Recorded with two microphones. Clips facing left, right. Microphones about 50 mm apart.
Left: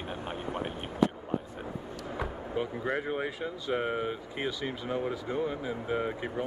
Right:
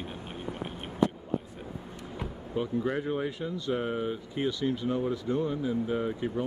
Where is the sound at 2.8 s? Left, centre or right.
Left.